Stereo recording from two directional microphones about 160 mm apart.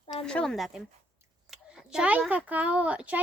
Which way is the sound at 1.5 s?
5° right (ahead or behind).